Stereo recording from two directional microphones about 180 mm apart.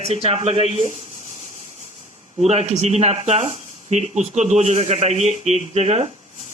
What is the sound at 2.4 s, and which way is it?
Speech, 35° right (ahead or behind).